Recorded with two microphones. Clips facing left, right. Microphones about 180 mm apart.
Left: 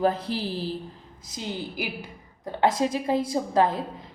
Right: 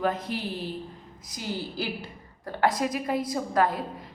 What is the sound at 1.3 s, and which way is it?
A woman's voice, 20° left (ahead or behind).